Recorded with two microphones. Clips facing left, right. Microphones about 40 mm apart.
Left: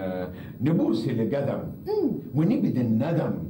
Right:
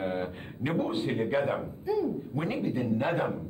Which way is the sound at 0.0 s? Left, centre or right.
Right.